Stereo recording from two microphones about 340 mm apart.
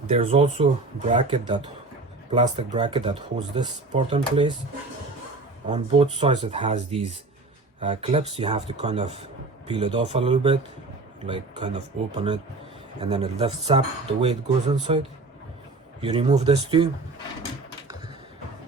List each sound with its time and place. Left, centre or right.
0.1 s speech: centre
5.6 s speech: centre
16.0 s speech: centre